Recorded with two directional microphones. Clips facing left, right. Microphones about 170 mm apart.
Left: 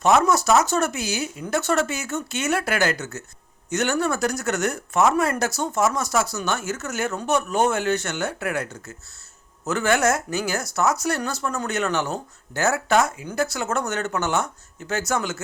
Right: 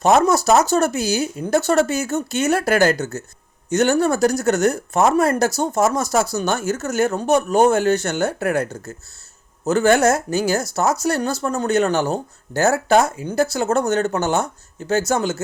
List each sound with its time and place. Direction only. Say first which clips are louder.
0.0 s speech: right 3 dB; 35° right (ahead or behind)